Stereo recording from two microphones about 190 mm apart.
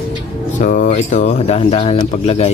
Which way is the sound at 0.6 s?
45° left (ahead or behind).